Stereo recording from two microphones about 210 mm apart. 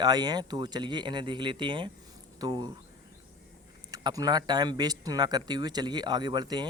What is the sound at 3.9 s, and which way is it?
Speech, 15° right (ahead or behind).